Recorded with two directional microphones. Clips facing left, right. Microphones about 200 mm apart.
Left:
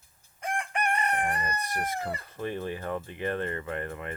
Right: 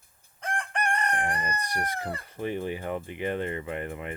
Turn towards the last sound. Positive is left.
turn(degrees=-15)  # may be behind; listen again after turning